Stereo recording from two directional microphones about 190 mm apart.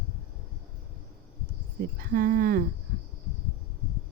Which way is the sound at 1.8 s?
50° right (ahead or behind).